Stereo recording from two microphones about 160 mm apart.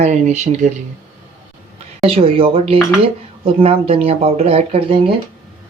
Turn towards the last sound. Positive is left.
turn(degrees=-40)  # may be behind; listen again after turning